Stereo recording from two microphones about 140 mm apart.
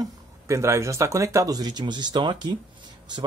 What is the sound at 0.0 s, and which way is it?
Speech, 20° right (ahead or behind).